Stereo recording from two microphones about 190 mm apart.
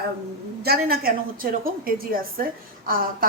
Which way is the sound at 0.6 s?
55° right (ahead or behind).